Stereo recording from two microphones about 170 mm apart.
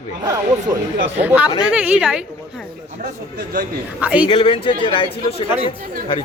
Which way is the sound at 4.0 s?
10° right (ahead or behind).